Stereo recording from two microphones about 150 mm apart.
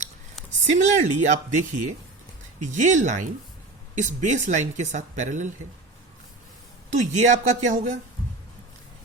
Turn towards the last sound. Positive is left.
turn(degrees=-55)  # may be behind; listen again after turning